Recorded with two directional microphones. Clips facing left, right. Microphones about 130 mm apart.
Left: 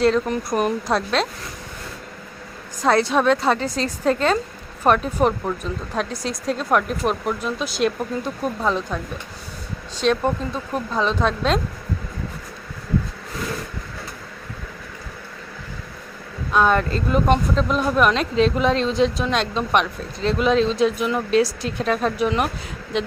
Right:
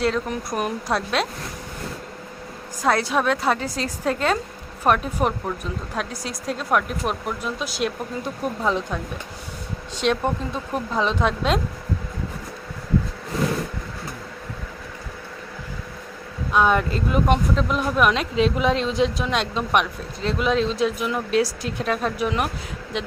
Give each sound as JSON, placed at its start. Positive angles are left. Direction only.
{"t": 0.0, "sound": "speech", "side_deg": -5}
{"t": 2.8, "sound": "speech", "side_deg": -5}
{"t": 10.0, "sound": "speech", "side_deg": -20}
{"t": 16.5, "sound": "speech", "side_deg": -10}